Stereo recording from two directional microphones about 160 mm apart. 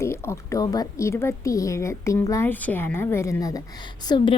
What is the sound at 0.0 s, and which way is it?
A woman's voice, 15° left (ahead or behind).